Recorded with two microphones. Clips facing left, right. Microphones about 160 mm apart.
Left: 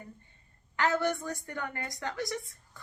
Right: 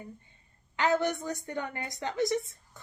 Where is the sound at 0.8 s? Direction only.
20° right (ahead or behind).